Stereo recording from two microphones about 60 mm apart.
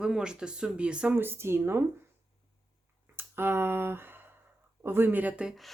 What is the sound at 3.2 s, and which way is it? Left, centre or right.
Speech, right.